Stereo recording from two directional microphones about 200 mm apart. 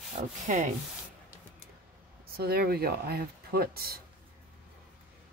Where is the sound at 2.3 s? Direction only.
50° right (ahead or behind).